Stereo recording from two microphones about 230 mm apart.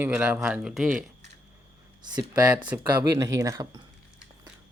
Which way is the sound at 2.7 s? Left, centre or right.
Centre.